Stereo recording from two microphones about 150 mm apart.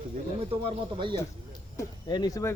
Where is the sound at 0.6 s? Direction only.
35° right (ahead or behind).